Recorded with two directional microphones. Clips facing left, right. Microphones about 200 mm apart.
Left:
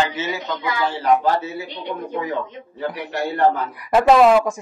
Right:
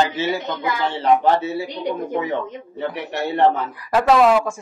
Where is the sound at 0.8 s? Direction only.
25° right (ahead or behind).